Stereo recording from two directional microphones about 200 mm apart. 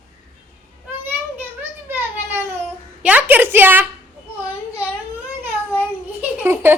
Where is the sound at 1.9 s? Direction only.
10° right (ahead or behind).